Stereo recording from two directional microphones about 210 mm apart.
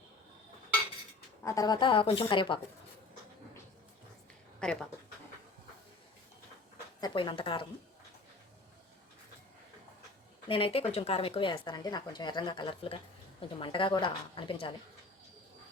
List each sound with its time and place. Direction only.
1.5 s a woman's voice: 15° left (ahead or behind)
4.6 s speech: 5° left (ahead or behind)
7.0 s a woman's voice: 20° left (ahead or behind)
10.5 s a woman's voice: 25° left (ahead or behind)